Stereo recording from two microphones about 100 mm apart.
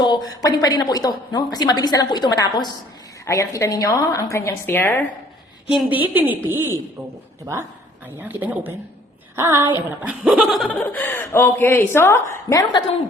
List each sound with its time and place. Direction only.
0.0 s speech: 45° left (ahead or behind)
3.2 s a woman's voice: 30° left (ahead or behind)
5.6 s a woman's voice: 15° right (ahead or behind)
8.2 s a woman's voice: 15° right (ahead or behind)
9.3 s a woman's voice: 30° right (ahead or behind)
10.0 s a woman's voice: 10° right (ahead or behind)
10.7 s speech: 15° left (ahead or behind)